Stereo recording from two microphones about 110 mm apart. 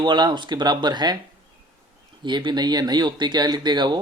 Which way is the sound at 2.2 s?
45° right (ahead or behind).